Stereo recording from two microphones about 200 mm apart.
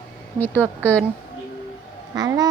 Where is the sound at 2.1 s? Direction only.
20° right (ahead or behind).